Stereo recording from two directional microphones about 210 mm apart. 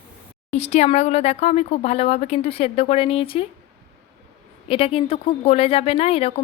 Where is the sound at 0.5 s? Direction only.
30° left (ahead or behind).